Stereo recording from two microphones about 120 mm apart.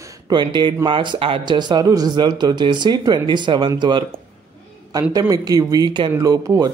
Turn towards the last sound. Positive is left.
turn(degrees=-30)  # may be behind; listen again after turning